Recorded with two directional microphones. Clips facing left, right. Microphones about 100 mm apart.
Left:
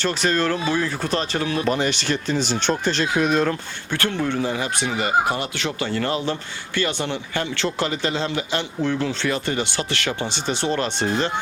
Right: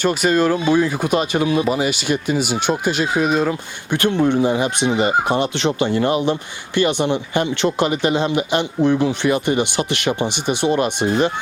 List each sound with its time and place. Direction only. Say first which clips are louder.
0.0 s speech: right 5 dB; 10° right (ahead or behind)
3.9 s speech: right 7 dB; 20° right (ahead or behind)